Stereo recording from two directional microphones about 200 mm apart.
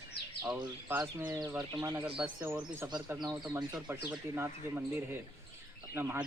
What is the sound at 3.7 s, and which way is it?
Speech, 5° right (ahead or behind).